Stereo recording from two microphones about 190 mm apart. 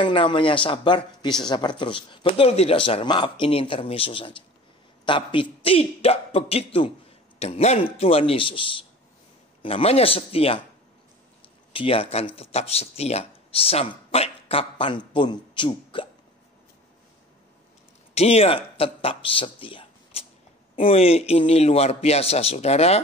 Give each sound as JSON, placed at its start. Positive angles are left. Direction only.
{"t": 0.0, "sound": "a man's voice", "side_deg": 25}
{"t": 18.1, "sound": "a man's voice", "side_deg": 35}